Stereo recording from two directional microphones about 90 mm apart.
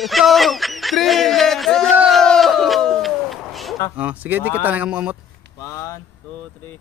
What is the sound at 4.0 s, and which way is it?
Speech, 20° right (ahead or behind).